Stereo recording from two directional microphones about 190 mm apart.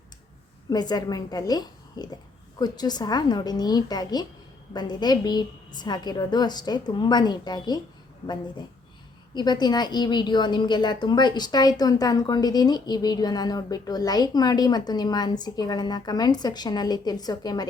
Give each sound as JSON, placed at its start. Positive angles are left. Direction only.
{"t": 0.7, "sound": "a woman's voice", "side_deg": 20}
{"t": 9.3, "sound": "a woman's voice", "side_deg": 20}